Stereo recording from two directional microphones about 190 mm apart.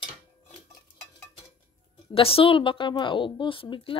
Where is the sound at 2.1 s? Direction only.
30° left (ahead or behind).